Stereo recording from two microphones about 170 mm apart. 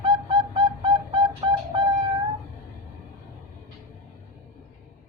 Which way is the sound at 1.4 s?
30° right (ahead or behind).